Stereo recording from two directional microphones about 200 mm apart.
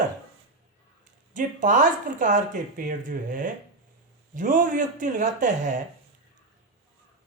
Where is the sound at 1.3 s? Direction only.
40° right (ahead or behind).